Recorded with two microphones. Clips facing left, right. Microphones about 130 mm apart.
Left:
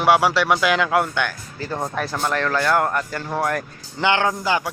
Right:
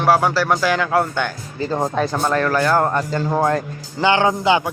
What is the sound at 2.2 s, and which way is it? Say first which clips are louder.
Speech: right 2 dB; 10° right (ahead or behind).